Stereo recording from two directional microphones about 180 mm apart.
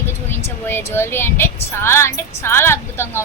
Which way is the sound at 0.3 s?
15° left (ahead or behind).